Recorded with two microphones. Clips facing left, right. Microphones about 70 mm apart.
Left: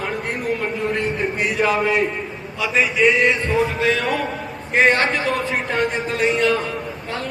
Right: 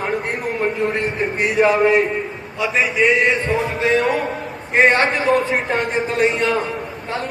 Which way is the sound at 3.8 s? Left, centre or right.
Right.